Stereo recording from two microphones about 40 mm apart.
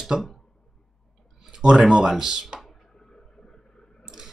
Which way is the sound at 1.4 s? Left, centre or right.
Centre.